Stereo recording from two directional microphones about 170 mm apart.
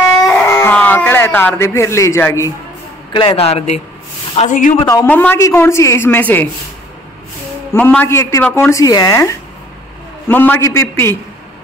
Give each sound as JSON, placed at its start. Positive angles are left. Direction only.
{"t": 0.5, "sound": "dog", "side_deg": 20}
{"t": 0.7, "sound": "a man's voice", "side_deg": 10}
{"t": 3.1, "sound": "a man's voice", "side_deg": 30}
{"t": 4.4, "sound": "speech", "side_deg": 45}
{"t": 4.8, "sound": "speech", "side_deg": 15}
{"t": 7.7, "sound": "speech", "side_deg": 10}